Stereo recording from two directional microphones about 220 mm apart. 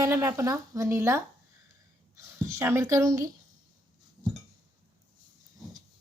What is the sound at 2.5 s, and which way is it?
Speech, 10° right (ahead or behind).